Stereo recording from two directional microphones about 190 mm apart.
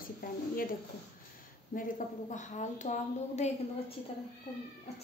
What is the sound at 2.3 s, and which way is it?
A woman's voice, 40° left (ahead or behind).